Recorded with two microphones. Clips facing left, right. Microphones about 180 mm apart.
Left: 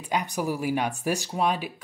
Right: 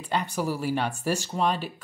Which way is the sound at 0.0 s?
10° left (ahead or behind).